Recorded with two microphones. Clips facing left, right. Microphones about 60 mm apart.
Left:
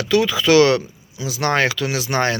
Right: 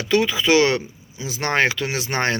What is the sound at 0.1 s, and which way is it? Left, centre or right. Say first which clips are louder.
Speech: left 2 dB; right.